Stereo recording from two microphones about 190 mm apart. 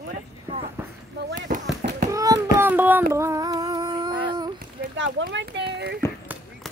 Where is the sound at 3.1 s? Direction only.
15° right (ahead or behind).